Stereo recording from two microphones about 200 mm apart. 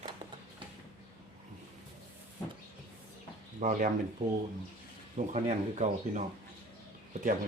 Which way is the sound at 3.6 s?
40° right (ahead or behind).